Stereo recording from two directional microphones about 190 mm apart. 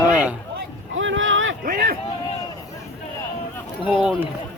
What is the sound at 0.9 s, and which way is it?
Boat, 90° right.